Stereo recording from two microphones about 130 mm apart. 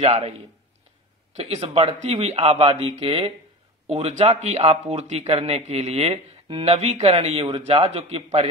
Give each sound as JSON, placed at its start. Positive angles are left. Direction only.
{"t": 0.0, "sound": "speech", "side_deg": -45}
{"t": 1.3, "sound": "speech", "side_deg": -50}
{"t": 1.8, "sound": "speech", "side_deg": -55}